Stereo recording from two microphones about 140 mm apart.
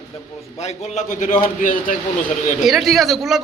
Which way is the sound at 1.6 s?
75° left (ahead or behind).